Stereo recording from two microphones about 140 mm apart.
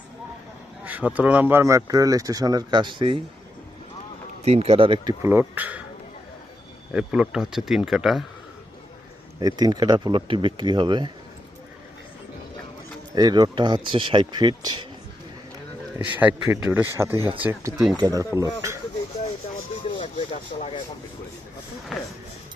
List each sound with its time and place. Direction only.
0.9 s speech: 10° right (ahead or behind); by 3.2 s 35° right (ahead or behind)
4.4 s speech: 45° right (ahead or behind)
5.2 s speech: 15° right (ahead or behind)
6.9 s speech: 5° right (ahead or behind)
9.4 s speech: 30° right (ahead or behind)
13.1 s speech: 30° right (ahead or behind)
16.1 s speech: 15° right (ahead or behind)
17.9 s speech: 25° right (ahead or behind)
20.0 s a sound: 50° left (ahead or behind)
21.9 s a sound: centre (ahead or behind)